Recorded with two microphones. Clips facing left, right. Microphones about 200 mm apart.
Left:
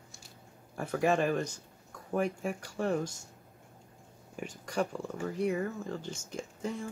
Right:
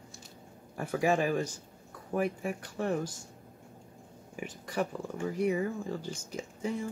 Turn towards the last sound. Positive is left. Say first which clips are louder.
# right 2 dB
turn(degrees=-5)  # may be behind; listen again after turning